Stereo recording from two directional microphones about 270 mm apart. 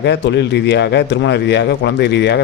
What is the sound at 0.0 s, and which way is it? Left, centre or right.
Speech, left.